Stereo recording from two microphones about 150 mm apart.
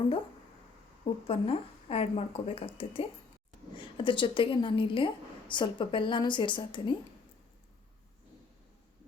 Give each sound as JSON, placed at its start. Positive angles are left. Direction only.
{"t": 1.3, "sound": "a woman's voice", "side_deg": 40}